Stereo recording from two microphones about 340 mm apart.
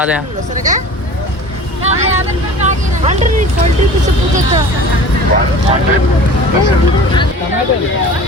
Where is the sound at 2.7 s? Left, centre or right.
Right.